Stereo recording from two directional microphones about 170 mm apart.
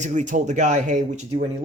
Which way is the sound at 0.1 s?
45° right (ahead or behind).